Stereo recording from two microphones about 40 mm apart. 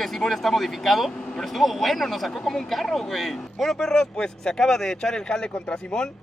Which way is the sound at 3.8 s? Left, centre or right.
Centre.